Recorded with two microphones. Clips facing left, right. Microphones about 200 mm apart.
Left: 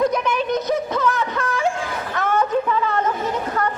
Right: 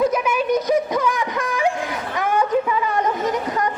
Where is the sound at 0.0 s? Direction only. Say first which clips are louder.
Right 1 dB; 5° right (ahead or behind).